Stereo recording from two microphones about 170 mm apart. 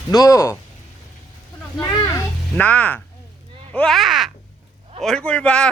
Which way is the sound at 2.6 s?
10° left (ahead or behind).